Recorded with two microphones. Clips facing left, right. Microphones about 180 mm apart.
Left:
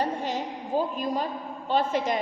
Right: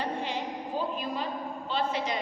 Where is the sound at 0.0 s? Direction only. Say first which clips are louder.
Left 4 dB; 45° left (ahead or behind).